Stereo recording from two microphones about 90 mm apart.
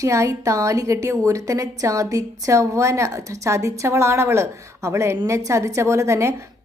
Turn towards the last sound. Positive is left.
turn(degrees=-30)  # may be behind; listen again after turning